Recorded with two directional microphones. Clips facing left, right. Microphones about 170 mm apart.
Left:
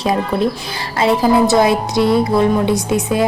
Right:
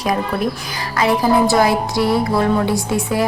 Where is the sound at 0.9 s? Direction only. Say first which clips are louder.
Left 2 dB; 25° left (ahead or behind).